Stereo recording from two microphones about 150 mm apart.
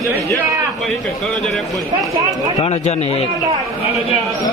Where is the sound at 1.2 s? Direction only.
5° left (ahead or behind).